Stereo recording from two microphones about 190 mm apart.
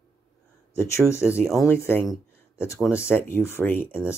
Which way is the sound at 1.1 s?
15° left (ahead or behind).